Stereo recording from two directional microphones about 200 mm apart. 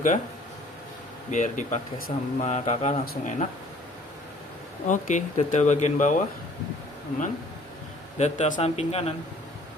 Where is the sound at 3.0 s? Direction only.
45° left (ahead or behind).